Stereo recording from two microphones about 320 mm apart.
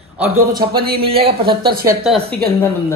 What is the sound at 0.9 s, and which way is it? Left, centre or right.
A man's voice, centre.